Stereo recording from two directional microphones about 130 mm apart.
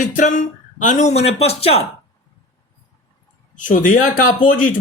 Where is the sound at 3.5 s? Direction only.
90° left.